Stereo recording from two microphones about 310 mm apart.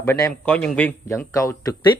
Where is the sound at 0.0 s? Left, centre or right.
Centre.